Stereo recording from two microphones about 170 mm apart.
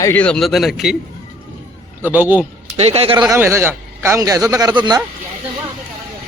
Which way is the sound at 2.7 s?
35° right (ahead or behind).